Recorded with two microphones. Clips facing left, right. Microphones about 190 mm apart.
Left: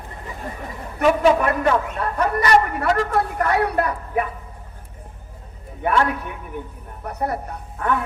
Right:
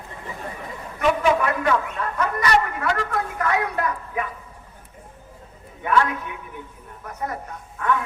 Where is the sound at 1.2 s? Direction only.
40° left (ahead or behind).